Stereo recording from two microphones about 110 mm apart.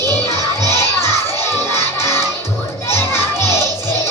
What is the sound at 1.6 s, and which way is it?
Music, 25° left (ahead or behind).